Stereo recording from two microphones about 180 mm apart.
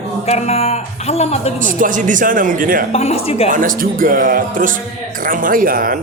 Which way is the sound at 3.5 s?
50° right (ahead or behind).